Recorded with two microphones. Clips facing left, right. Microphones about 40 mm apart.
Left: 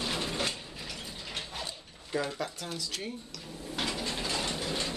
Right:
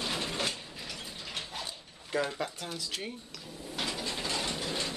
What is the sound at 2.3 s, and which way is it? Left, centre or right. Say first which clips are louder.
Speech: even; right.